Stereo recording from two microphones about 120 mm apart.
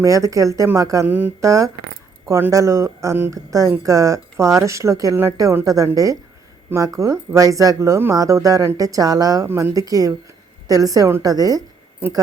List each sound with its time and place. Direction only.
0.0 s a woman's voice: 25° right (ahead or behind)
1.0 s speech: 15° right (ahead or behind)
1.4 s a woman's voice: 25° right (ahead or behind)
9.5 s speech: 15° right (ahead or behind)
9.7 s a woman's voice: 30° right (ahead or behind)